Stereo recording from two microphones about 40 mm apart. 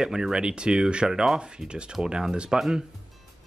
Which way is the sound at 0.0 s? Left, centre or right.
Centre.